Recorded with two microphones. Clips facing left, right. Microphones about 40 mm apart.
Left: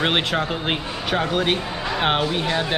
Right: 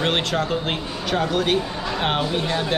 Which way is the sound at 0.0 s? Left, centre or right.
Centre.